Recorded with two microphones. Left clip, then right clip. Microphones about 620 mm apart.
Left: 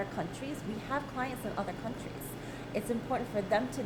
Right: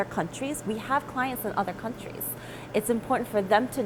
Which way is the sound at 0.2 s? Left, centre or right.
Right.